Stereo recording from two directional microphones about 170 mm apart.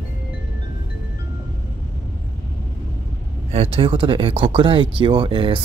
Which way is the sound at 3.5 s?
35° right (ahead or behind).